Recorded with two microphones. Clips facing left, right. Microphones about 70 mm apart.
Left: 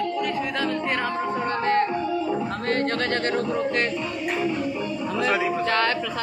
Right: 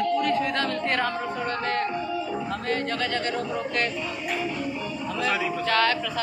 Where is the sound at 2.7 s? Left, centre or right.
Left.